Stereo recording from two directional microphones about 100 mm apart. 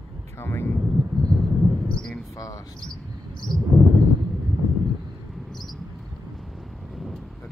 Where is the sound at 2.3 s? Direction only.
35° left (ahead or behind).